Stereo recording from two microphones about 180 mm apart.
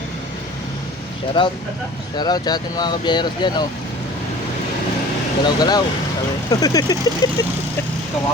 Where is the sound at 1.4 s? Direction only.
25° left (ahead or behind).